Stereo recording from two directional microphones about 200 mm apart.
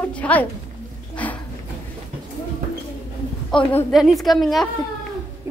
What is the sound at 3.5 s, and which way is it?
A child's voice, 5° left (ahead or behind).